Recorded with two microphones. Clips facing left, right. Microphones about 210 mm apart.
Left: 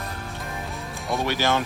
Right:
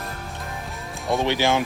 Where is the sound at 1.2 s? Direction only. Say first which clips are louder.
Right 2 dB; 15° right (ahead or behind).